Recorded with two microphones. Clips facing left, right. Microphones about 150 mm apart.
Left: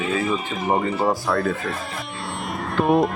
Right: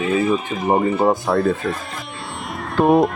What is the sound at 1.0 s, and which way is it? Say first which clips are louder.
Speech: right 4 dB; 25° right (ahead or behind).